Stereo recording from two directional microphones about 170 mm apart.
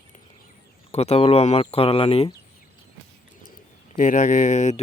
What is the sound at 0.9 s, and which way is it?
Speech, 35° left (ahead or behind).